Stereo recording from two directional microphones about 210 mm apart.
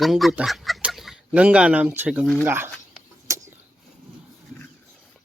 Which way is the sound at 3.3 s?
15° right (ahead or behind).